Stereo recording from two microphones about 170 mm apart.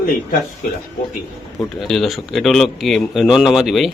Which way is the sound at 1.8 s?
Centre (ahead or behind).